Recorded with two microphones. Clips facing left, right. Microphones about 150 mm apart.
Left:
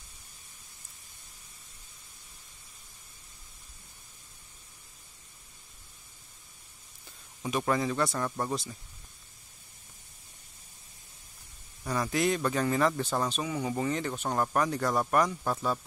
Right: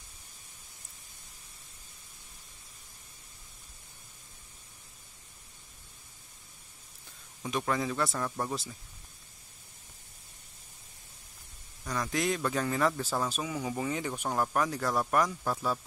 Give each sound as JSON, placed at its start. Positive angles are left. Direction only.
{"t": 7.4, "sound": "a man's voice", "side_deg": 5}
{"t": 11.8, "sound": "a man's voice", "side_deg": 10}